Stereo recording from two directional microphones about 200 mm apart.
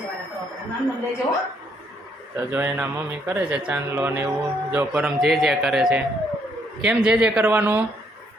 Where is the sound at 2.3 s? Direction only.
10° right (ahead or behind).